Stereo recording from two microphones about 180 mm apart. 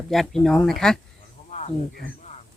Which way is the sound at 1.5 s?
40° left (ahead or behind).